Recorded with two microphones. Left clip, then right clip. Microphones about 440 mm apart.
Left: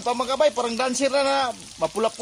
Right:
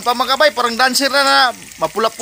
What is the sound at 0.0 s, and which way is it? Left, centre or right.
A man's voice, left.